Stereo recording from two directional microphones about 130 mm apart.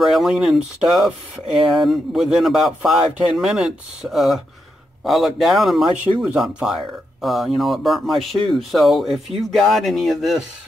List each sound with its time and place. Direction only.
0.0 s speech: centre (ahead or behind)